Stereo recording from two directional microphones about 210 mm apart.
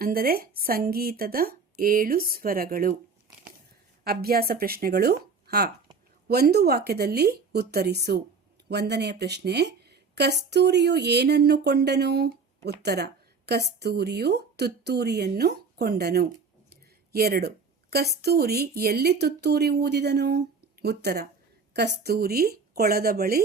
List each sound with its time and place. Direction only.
0.0 s a woman's voice: 45° right (ahead or behind)
4.0 s a woman's voice: 45° right (ahead or behind)